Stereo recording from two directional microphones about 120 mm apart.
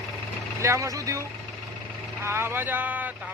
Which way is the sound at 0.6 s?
25° right (ahead or behind).